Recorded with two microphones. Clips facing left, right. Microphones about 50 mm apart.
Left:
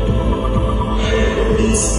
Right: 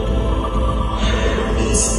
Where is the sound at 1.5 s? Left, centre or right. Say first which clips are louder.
Left 4 dB; centre.